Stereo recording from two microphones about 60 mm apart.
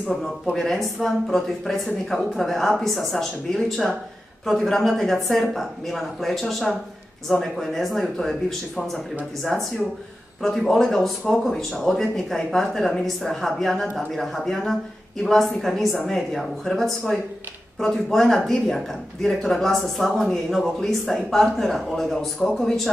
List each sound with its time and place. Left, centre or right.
0.1 s speech: centre